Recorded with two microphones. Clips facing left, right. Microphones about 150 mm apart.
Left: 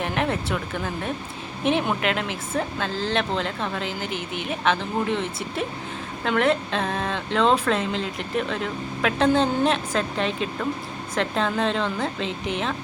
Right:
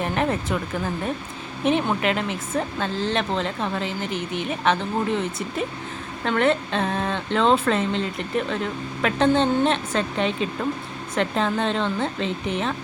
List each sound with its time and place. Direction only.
0.0 s speech: centre (ahead or behind)